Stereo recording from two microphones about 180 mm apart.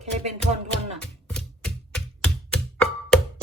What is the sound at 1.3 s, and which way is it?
Music, 5° left (ahead or behind).